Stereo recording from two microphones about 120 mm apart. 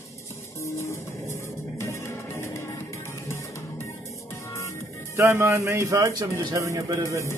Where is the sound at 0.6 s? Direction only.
25° left (ahead or behind).